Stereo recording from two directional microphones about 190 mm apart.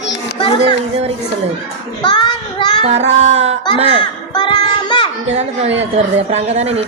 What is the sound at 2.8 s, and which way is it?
Music, 35° right (ahead or behind).